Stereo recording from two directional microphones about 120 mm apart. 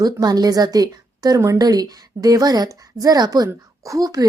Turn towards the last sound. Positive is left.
turn(degrees=-30)  # may be behind; listen again after turning